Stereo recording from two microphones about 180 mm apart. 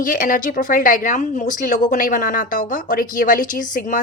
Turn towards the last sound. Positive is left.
turn(degrees=45)  # may be behind; listen again after turning